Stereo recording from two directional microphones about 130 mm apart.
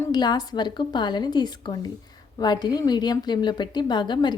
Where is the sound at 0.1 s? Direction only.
30° left (ahead or behind).